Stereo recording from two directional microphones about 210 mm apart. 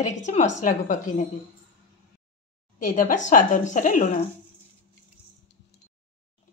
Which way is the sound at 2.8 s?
40° left (ahead or behind).